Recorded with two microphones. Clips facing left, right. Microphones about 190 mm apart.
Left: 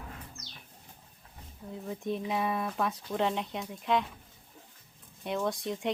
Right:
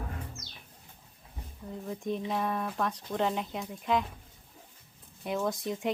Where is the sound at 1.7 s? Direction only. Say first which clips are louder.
Even; centre (ahead or behind).